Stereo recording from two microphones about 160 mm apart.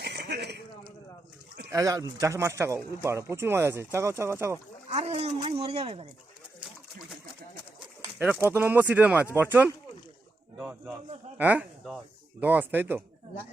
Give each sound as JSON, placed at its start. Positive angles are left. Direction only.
{"t": 0.0, "sound": "a sound", "side_deg": -90}
{"t": 1.7, "sound": "speech", "side_deg": -20}
{"t": 4.9, "sound": "speech", "side_deg": -40}
{"t": 8.2, "sound": "speech", "side_deg": -10}